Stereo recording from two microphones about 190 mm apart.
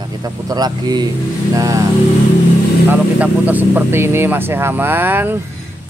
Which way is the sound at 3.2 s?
10° right (ahead or behind).